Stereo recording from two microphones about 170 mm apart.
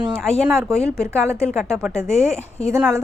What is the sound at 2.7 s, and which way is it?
Speech, 15° right (ahead or behind).